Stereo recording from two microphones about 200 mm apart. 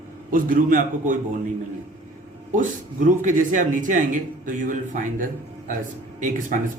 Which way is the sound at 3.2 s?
40° right (ahead or behind).